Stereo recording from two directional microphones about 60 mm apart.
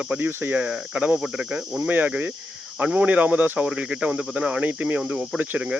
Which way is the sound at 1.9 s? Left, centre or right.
Right.